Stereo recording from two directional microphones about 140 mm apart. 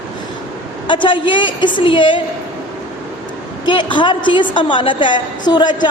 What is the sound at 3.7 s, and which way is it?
A woman's voice, 35° left (ahead or behind).